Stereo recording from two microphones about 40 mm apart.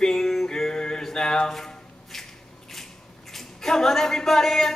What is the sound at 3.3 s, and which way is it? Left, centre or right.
Speech, centre.